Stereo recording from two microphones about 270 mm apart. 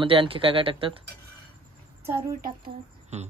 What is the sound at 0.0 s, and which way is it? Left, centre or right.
Speech, centre.